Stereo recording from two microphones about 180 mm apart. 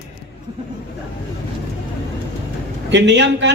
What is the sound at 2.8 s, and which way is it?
Speech, 75° right (ahead or behind).